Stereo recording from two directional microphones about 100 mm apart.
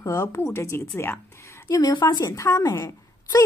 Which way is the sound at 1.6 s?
35° left (ahead or behind).